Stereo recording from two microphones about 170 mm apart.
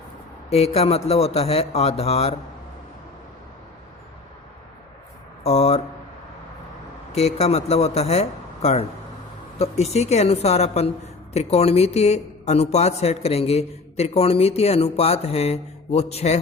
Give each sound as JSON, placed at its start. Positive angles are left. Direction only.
{"t": 0.5, "sound": "a woman's voice", "side_deg": 35}
{"t": 5.4, "sound": "a sound", "side_deg": 35}
{"t": 7.1, "sound": "a woman's voice", "side_deg": 40}